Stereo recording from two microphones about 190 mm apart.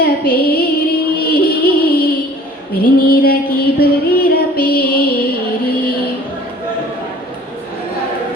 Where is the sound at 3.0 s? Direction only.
50° left (ahead or behind).